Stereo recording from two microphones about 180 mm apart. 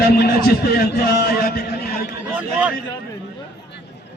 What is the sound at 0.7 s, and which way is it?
A man's voice, 60° left (ahead or behind).